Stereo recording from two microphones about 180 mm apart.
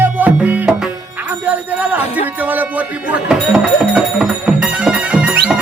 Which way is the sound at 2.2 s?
10° right (ahead or behind).